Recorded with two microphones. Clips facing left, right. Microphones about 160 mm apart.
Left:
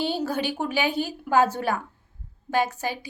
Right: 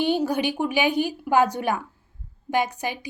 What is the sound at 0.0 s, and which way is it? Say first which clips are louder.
A woman's voice: right 4 dB; 15° right (ahead or behind).